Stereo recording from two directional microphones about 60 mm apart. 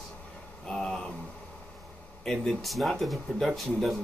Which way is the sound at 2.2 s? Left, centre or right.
Centre.